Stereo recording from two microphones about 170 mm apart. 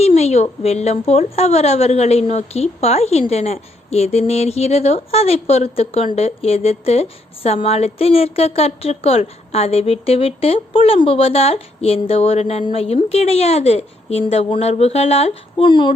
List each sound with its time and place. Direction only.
0.0 s a woman's voice: 40° left (ahead or behind)